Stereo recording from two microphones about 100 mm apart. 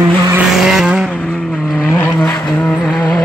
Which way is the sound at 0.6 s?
5° right (ahead or behind).